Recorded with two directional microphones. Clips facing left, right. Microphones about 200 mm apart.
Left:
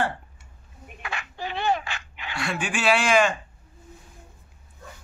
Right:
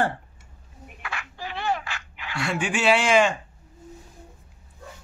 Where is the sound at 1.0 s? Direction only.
20° left (ahead or behind).